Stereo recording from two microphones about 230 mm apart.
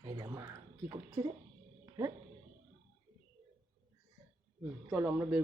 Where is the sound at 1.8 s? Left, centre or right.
Centre.